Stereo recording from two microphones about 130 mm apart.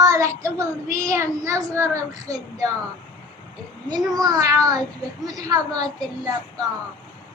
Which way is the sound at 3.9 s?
30° right (ahead or behind).